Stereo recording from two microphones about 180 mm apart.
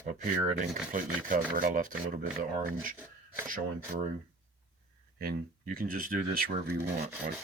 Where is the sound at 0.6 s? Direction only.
45° right (ahead or behind).